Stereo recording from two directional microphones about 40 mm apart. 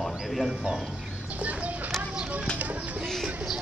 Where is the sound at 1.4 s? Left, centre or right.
Right.